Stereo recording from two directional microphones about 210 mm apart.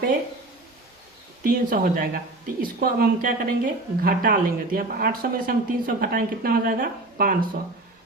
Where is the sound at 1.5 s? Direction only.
45° right (ahead or behind).